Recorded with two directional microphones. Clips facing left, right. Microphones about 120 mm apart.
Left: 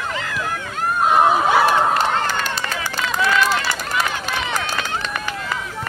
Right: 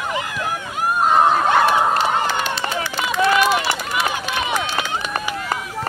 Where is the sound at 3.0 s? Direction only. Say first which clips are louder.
Right 2 dB; 15° right (ahead or behind).